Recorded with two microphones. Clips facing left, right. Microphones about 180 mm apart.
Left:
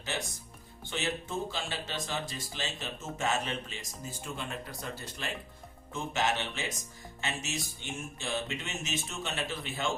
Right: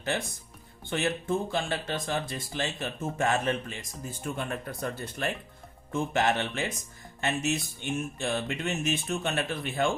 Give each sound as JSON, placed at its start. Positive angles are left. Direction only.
{"t": 0.0, "sound": "speech", "side_deg": -55}